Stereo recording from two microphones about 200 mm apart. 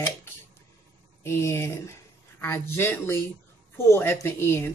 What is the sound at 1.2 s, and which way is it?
Speech, 15° left (ahead or behind).